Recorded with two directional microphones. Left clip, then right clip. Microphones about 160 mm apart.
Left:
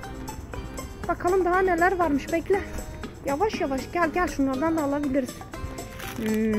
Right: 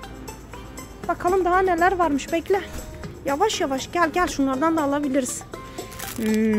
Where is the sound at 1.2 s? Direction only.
20° right (ahead or behind).